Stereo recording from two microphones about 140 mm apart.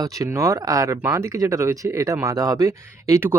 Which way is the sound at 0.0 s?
25° right (ahead or behind).